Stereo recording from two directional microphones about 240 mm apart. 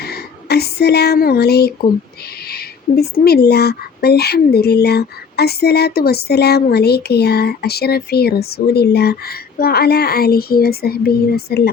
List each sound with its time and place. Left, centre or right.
0.0 s speech: left